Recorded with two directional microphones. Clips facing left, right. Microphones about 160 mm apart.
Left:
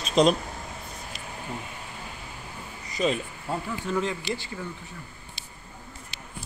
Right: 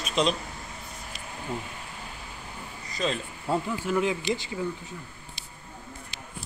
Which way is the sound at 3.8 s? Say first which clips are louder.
Right 2 dB; 10° right (ahead or behind).